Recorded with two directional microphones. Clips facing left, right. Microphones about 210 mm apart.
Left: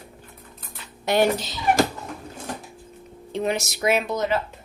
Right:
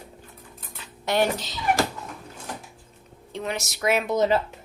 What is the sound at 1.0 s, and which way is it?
Speech, 10° left (ahead or behind).